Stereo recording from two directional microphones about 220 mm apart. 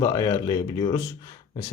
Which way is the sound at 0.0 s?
15° left (ahead or behind).